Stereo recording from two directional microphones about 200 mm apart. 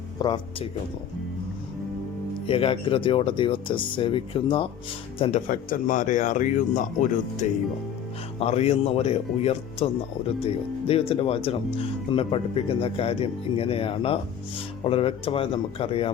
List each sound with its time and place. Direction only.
0.2 s speech: 20° left (ahead or behind)
2.5 s speech: 25° left (ahead or behind)
5.5 s speech: 45° left (ahead or behind); by 16.1 s 30° left (ahead or behind)